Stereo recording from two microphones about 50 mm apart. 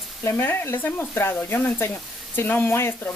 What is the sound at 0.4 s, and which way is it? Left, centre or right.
Speech, left.